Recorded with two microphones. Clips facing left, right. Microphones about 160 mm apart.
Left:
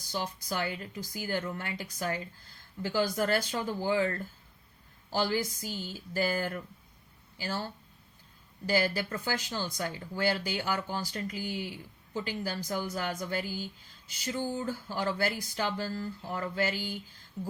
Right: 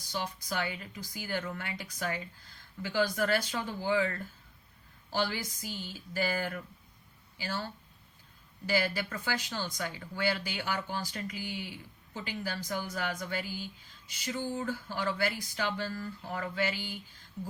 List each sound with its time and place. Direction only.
0.1 s speech: 40° left (ahead or behind)
8.6 s speech: 40° left (ahead or behind)
14.8 s speech: 40° left (ahead or behind)